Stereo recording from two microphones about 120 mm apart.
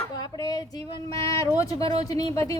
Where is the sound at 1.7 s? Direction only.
55° right (ahead or behind).